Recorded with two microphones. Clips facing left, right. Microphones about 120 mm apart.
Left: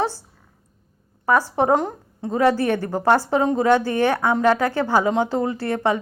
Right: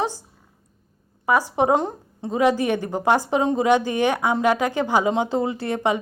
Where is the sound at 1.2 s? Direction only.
15° right (ahead or behind).